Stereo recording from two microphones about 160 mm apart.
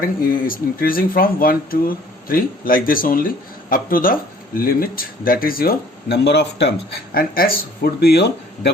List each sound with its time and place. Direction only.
0.0 s speech: 60° left (ahead or behind); by 8.7 s 90° left